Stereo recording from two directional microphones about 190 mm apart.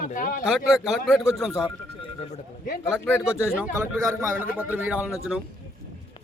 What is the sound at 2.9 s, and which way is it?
Speech, 10° left (ahead or behind).